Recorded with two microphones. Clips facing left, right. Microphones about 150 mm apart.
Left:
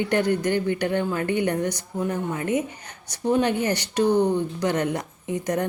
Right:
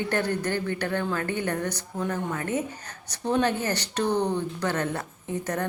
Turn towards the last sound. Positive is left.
turn(degrees=15)  # may be behind; listen again after turning